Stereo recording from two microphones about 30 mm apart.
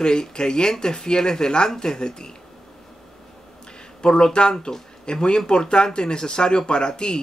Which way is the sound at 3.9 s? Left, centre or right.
Left.